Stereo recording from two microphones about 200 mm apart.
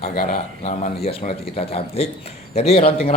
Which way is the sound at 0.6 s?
35° left (ahead or behind).